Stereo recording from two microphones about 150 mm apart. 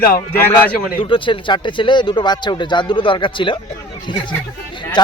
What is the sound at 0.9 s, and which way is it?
Speech, 35° left (ahead or behind).